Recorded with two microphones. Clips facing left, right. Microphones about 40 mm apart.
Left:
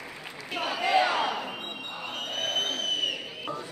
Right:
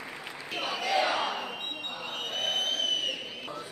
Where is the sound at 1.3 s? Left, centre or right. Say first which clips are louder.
Left 2 dB; centre.